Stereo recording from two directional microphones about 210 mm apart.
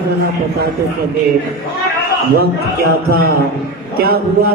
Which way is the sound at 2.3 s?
45° right (ahead or behind).